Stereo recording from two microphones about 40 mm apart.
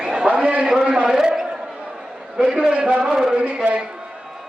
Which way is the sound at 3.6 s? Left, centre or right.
Right.